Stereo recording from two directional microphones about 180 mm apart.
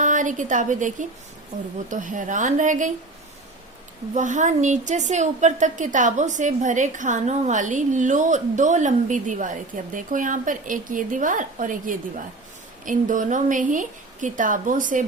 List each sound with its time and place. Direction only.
0.0 s a woman's voice: 45° right (ahead or behind)
4.1 s a woman's voice: 45° right (ahead or behind)